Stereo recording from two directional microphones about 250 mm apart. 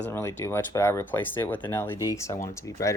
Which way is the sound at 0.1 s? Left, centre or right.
Centre.